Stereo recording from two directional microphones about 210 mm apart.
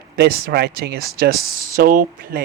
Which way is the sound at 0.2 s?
50° right (ahead or behind).